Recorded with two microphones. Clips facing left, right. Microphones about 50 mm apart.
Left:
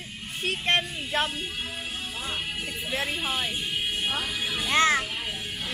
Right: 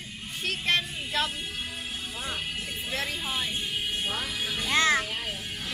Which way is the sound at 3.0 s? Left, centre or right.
Left.